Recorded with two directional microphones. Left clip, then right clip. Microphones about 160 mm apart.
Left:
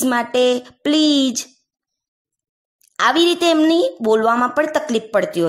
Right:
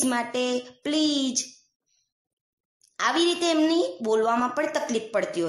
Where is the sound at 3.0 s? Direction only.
45° left (ahead or behind).